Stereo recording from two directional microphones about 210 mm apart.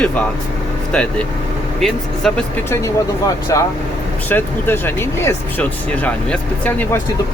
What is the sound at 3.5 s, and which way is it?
Speech, 15° left (ahead or behind).